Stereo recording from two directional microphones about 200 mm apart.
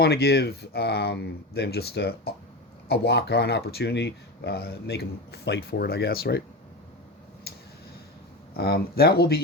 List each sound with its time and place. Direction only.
0.0 s speech: 50° left (ahead or behind)
8.5 s speech: 50° left (ahead or behind)